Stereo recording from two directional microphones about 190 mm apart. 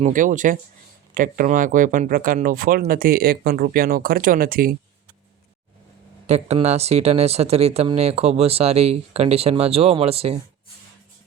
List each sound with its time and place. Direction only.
0.0 s speech: 45° right (ahead or behind)
6.2 s speech: 35° right (ahead or behind)